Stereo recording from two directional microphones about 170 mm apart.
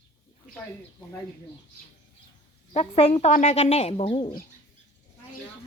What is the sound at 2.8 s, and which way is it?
Speech, 35° left (ahead or behind).